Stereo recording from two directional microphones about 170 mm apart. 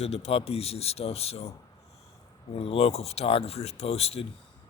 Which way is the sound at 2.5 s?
35° left (ahead or behind).